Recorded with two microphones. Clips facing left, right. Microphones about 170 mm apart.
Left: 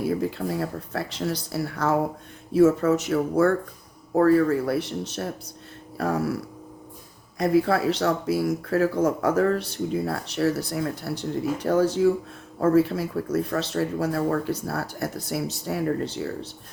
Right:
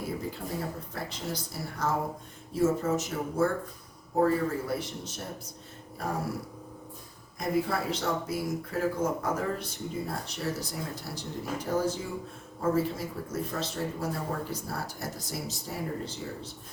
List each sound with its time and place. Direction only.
0.2 s speech: 70° left (ahead or behind)
7.3 s speech: 75° left (ahead or behind)